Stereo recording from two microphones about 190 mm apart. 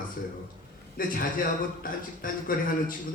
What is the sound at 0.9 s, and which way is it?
A man's voice, 50° left (ahead or behind).